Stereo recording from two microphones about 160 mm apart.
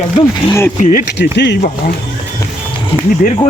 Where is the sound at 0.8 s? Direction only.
50° left (ahead or behind).